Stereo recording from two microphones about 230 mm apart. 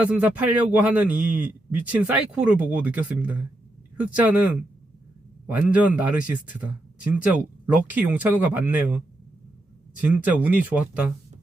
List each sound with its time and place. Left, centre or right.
0.0 s a man's voice: centre
5.5 s a man's voice: centre
10.0 s speech: centre